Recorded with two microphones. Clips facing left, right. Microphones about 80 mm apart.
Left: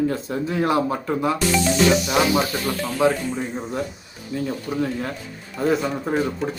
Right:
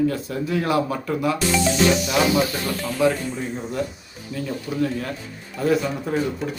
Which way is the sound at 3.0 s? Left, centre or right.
Left.